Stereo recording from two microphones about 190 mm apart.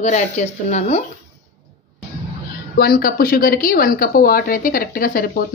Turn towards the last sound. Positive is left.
turn(degrees=50)  # may be behind; listen again after turning